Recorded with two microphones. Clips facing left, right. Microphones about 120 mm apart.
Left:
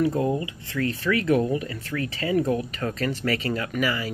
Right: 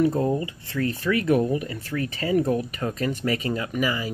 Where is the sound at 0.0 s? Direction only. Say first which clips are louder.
Right 1 dB; 30° right (ahead or behind).